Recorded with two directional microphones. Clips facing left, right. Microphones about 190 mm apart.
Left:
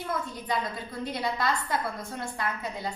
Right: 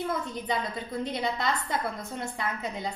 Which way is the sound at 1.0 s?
20° right (ahead or behind).